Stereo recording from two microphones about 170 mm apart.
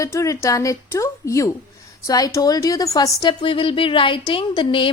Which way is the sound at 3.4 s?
30° left (ahead or behind).